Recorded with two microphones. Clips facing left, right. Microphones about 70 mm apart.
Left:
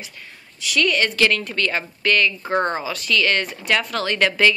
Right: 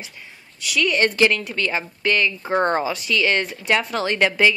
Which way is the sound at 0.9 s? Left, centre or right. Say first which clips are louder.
Right 5 dB; right.